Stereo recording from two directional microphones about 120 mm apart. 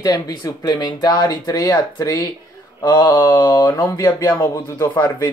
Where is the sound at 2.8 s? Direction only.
35° left (ahead or behind).